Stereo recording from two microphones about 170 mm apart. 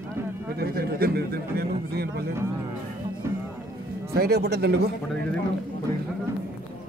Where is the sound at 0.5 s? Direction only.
65° right (ahead or behind).